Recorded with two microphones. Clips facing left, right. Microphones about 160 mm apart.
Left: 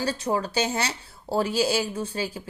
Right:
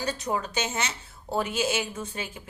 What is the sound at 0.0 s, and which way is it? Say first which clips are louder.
A woman's voice: left 3 dB; 30° left (ahead or behind).